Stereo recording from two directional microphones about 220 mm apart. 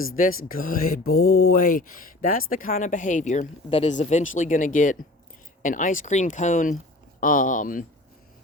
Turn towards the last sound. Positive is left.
turn(degrees=35)  # may be behind; listen again after turning